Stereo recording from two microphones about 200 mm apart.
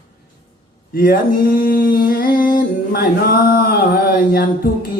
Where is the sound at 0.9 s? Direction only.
45° left (ahead or behind).